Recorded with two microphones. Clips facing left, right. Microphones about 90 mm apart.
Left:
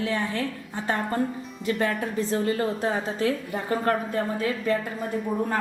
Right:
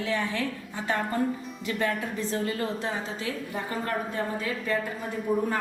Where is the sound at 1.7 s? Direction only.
40° left (ahead or behind).